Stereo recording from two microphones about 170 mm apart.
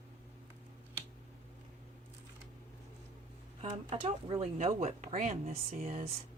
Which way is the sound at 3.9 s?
35° right (ahead or behind).